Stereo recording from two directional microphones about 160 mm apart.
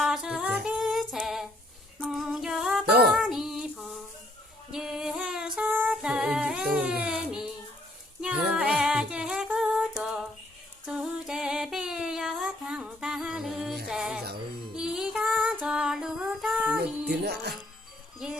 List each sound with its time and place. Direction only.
0.0 s humming: 5° right (ahead or behind)
0.6 s female singing: 5° right (ahead or behind)
2.0 s a sound: centre (ahead or behind)
2.9 s child singing: 90° right
3.2 s child singing: centre (ahead or behind)
4.7 s a sound: 5° right (ahead or behind)
8.2 s female singing: 5° right (ahead or behind)
10.8 s a sound: 5° right (ahead or behind)
13.8 s music: 5° right (ahead or behind)
17.1 s music: 90° right